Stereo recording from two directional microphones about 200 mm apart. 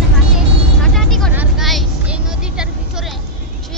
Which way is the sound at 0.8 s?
Centre (ahead or behind).